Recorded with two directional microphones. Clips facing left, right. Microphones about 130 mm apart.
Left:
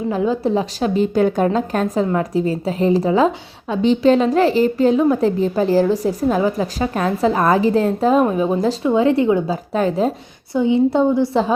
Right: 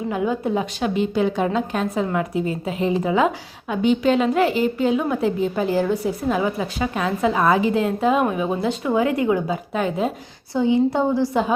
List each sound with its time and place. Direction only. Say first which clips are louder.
0.1 s a woman's voice: left 4 dB; 30° left (ahead or behind)
10.6 s a woman's voice: left 3 dB; 20° left (ahead or behind)